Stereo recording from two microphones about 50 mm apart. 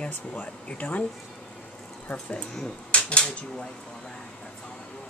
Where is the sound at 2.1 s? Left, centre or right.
Left.